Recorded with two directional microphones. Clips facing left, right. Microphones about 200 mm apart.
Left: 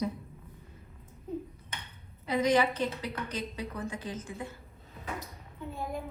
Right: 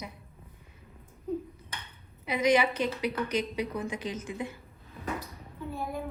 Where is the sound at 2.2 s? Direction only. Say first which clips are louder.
Right 1 dB; 15° right (ahead or behind).